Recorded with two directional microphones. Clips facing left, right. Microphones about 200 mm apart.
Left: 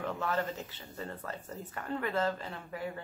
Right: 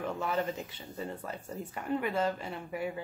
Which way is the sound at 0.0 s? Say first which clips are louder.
Right 1 dB; 15° right (ahead or behind).